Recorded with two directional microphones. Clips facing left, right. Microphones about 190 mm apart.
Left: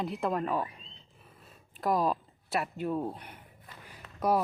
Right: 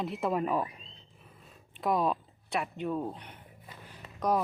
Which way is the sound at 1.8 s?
Centre (ahead or behind).